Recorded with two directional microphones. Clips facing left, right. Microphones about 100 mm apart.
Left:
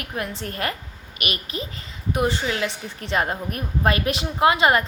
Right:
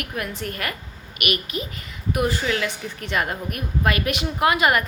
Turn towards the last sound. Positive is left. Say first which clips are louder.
# left 1 dB
turn(degrees=25)  # may be behind; listen again after turning